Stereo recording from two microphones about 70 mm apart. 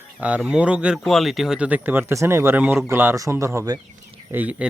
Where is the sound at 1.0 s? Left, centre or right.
Centre.